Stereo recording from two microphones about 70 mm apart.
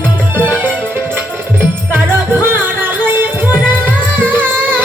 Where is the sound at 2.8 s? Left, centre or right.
Right.